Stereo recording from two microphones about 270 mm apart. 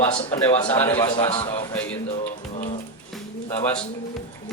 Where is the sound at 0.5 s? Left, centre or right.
Centre.